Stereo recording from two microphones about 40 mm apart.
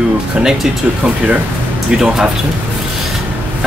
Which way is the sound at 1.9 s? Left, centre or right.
Centre.